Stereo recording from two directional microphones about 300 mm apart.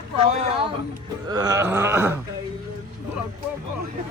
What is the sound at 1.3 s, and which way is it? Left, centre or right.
Speech, centre.